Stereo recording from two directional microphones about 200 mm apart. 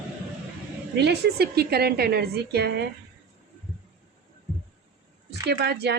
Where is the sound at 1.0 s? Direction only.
55° right (ahead or behind).